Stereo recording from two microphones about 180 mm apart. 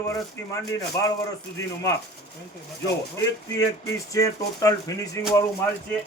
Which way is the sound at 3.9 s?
20° left (ahead or behind).